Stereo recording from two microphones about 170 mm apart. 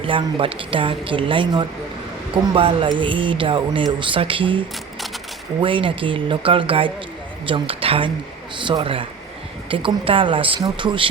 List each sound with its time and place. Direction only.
0.0 s speech: 30° right (ahead or behind)